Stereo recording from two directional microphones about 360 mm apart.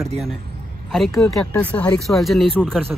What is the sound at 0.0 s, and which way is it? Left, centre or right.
A man's voice, centre.